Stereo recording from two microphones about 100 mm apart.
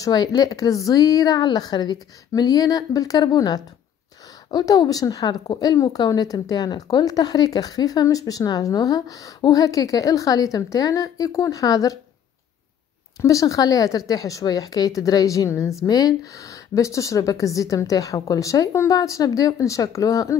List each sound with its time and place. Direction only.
0.0 s a woman's voice: 40° left (ahead or behind)
13.2 s a woman's voice: 35° left (ahead or behind)